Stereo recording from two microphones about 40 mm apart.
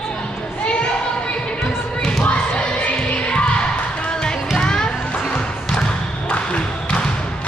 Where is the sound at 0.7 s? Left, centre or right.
Left.